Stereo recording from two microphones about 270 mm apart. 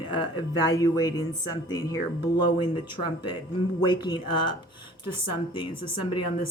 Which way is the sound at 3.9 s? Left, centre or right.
Centre.